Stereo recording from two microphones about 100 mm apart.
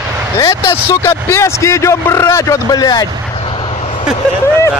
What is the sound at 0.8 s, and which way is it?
A man's voice, 25° left (ahead or behind).